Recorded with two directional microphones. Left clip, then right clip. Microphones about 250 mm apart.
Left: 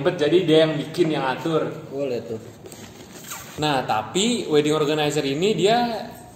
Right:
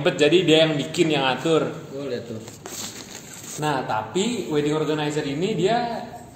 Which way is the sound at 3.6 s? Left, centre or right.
Left.